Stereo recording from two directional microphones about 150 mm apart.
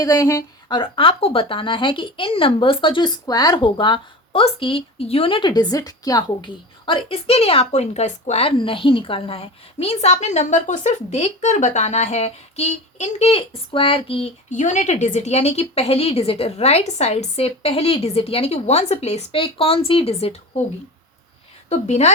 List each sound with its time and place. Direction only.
0.0 s a woman's voice: 25° left (ahead or behind)
0.7 s a woman's voice: 35° left (ahead or behind)
14.5 s a woman's voice: 55° left (ahead or behind); by 20.3 s 40° left (ahead or behind)
21.7 s a woman's voice: 50° left (ahead or behind)